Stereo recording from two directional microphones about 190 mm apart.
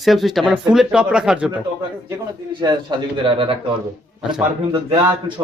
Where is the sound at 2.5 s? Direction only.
25° right (ahead or behind).